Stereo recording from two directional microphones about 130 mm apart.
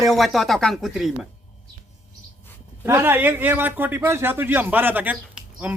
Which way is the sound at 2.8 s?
20° right (ahead or behind).